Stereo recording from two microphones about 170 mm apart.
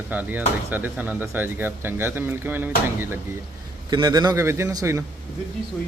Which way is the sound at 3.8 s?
25° right (ahead or behind).